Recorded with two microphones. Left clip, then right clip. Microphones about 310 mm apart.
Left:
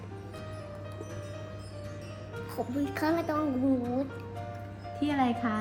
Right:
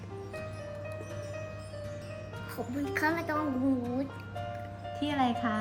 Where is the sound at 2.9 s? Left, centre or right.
Centre.